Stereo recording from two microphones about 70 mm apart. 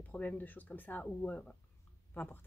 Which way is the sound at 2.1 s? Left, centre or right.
Left.